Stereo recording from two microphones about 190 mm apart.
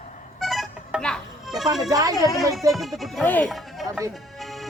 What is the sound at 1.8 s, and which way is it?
Speech, 20° right (ahead or behind).